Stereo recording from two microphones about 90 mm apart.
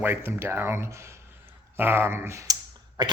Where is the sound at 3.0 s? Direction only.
50° right (ahead or behind).